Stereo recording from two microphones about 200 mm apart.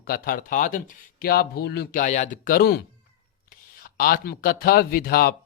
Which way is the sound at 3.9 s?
45° left (ahead or behind).